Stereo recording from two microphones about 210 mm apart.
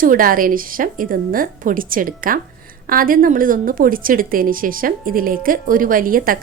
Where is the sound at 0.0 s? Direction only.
40° right (ahead or behind).